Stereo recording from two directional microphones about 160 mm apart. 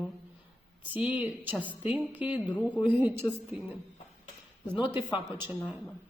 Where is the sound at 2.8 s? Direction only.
10° right (ahead or behind).